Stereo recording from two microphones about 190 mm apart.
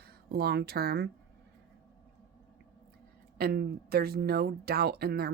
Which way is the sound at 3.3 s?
55° right (ahead or behind).